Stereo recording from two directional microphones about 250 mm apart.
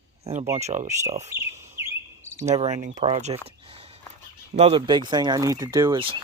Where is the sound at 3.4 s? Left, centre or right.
Right.